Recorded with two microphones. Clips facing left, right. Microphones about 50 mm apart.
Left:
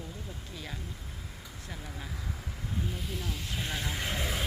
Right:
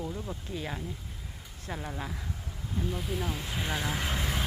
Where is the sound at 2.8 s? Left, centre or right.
Centre.